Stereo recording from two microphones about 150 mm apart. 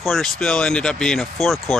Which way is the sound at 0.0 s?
Centre (ahead or behind).